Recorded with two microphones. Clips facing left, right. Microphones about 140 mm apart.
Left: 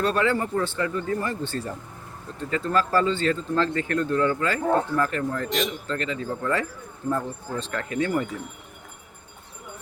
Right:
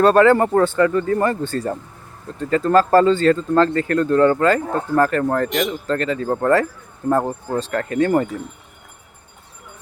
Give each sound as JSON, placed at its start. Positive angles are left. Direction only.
{"t": 0.0, "sound": "speech", "side_deg": -50}
{"t": 1.5, "sound": "speech", "side_deg": -45}